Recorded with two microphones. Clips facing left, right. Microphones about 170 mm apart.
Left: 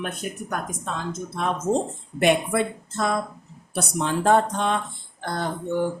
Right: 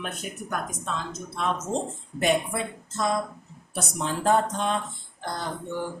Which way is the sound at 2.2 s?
65° left (ahead or behind).